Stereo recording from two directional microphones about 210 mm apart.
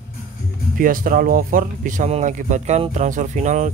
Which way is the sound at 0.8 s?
40° right (ahead or behind).